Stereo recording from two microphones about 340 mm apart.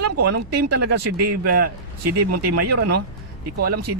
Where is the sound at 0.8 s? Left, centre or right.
Right.